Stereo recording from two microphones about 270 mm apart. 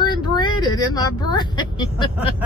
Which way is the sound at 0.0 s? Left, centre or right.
Centre.